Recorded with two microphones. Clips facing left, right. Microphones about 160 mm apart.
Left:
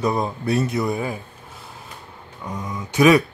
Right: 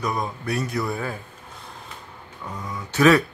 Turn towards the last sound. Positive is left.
turn(degrees=15)  # may be behind; listen again after turning